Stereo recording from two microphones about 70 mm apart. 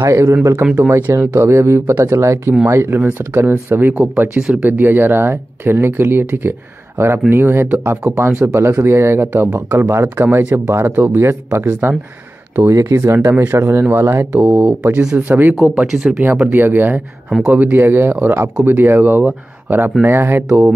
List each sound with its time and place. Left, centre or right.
0.0 s speech: right
3.9 s speech: centre
4.6 s speech: right
14.3 s speech: right
15.5 s speech: centre
16.3 s speech: right